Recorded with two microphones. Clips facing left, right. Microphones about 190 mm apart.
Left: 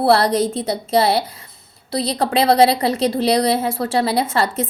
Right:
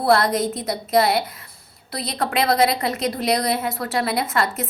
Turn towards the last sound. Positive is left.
turn(degrees=30)  # may be behind; listen again after turning